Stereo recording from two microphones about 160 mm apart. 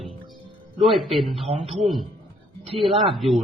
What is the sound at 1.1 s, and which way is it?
Speech, centre (ahead or behind).